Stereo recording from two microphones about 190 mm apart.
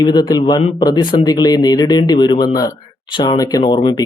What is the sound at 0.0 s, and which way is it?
Speech, 20° left (ahead or behind).